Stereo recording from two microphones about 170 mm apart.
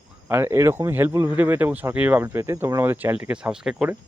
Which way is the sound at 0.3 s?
15° right (ahead or behind).